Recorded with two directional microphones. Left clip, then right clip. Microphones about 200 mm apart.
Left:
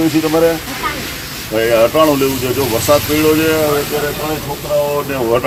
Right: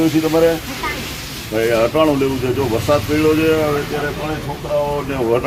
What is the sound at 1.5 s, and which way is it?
Speech, 15° left (ahead or behind).